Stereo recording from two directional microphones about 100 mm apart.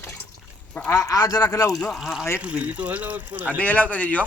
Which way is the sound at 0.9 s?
35° left (ahead or behind).